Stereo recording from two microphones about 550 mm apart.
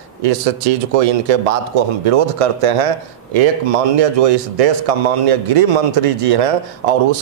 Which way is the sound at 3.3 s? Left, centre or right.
Right.